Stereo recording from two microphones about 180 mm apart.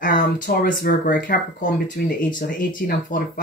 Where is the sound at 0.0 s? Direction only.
55° left (ahead or behind).